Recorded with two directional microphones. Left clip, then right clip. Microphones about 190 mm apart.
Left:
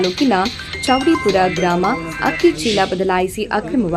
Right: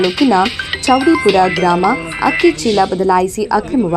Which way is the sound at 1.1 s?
25° right (ahead or behind).